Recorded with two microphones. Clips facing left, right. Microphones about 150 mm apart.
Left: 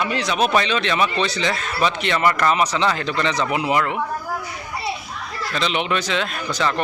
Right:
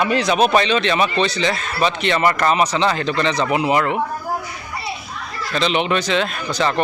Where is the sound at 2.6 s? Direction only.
25° right (ahead or behind).